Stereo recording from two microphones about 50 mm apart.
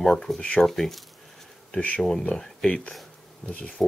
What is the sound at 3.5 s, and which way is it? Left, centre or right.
Speech, left.